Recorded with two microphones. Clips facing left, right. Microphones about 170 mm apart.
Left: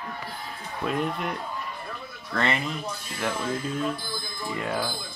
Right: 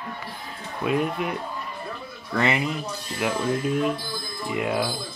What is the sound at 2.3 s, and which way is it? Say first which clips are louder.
Speech: right 3 dB; 10° right (ahead or behind).